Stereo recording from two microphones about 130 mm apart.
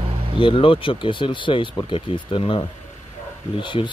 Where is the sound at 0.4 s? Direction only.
40° left (ahead or behind).